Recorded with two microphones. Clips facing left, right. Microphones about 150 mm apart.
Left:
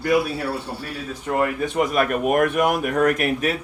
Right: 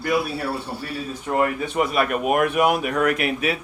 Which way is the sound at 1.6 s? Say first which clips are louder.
Left 1 dB; 45° left (ahead or behind).